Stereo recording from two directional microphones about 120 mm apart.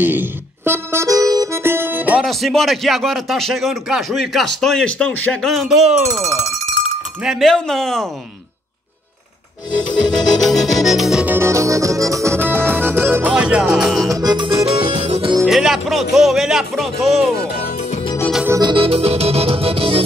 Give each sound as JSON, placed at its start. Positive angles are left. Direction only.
{"t": 0.0, "sound": "accordion", "side_deg": -15}
{"t": 2.2, "sound": "speech", "side_deg": 0}
{"t": 7.2, "sound": "speech", "side_deg": 0}
{"t": 10.1, "sound": "music", "side_deg": 0}
{"t": 11.2, "sound": "accordion", "side_deg": -20}
{"t": 13.3, "sound": "music", "side_deg": -10}
{"t": 14.0, "sound": "music", "side_deg": -30}
{"t": 14.7, "sound": "music", "side_deg": -60}
{"t": 15.4, "sound": "speech", "side_deg": -5}
{"t": 18.6, "sound": "music", "side_deg": -45}